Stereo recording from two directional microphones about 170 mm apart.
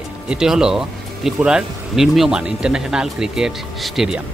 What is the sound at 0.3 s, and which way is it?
Speech, 5° right (ahead or behind).